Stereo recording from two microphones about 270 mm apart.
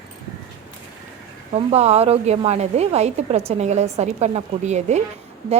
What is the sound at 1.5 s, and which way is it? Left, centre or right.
Speech, right.